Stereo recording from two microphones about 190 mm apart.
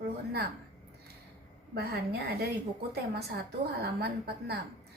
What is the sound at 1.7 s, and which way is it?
A woman's voice, 55° right (ahead or behind).